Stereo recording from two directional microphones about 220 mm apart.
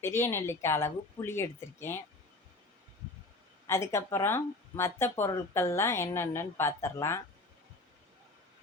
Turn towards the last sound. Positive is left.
turn(degrees=10)  # may be behind; listen again after turning